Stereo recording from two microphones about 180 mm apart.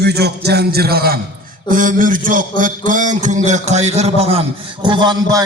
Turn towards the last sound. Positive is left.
turn(degrees=-20)  # may be behind; listen again after turning